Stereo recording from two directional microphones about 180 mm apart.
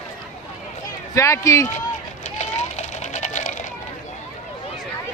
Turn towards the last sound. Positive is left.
turn(degrees=40)  # may be behind; listen again after turning